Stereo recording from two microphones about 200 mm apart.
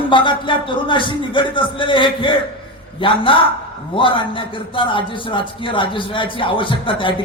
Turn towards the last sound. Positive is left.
turn(degrees=25)  # may be behind; listen again after turning